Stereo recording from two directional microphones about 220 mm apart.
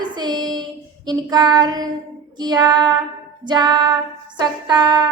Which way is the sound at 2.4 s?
20° right (ahead or behind).